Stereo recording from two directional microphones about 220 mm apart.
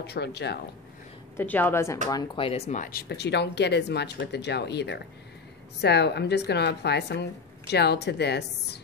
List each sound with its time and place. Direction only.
0.0 s speech: 50° left (ahead or behind)
1.3 s a woman's voice: 10° left (ahead or behind); by 8.7 s 50° left (ahead or behind)